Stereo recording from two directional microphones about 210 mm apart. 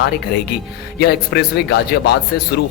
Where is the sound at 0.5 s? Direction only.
50° left (ahead or behind).